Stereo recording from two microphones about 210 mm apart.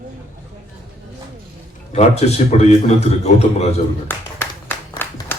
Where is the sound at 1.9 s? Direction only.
30° left (ahead or behind).